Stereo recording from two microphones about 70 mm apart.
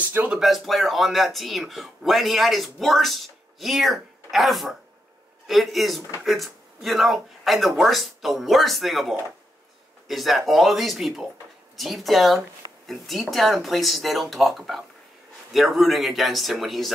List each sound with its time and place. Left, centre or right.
0.0 s speech: right
0.3 s speech: centre